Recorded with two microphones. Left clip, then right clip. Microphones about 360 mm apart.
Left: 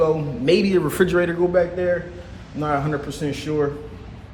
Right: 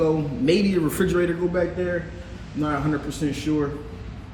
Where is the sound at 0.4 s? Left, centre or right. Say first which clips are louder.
Left 4 dB; left.